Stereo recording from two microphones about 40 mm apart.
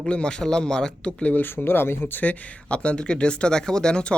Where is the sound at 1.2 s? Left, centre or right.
Left.